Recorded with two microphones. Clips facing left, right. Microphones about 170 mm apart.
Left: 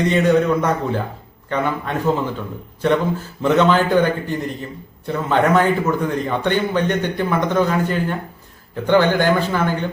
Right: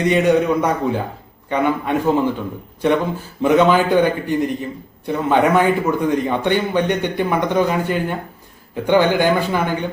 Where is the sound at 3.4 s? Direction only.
10° right (ahead or behind).